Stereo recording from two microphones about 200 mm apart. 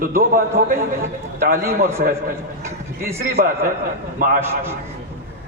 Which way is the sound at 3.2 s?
45° right (ahead or behind).